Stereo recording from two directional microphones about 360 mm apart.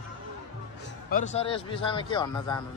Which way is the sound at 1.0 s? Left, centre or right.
Left.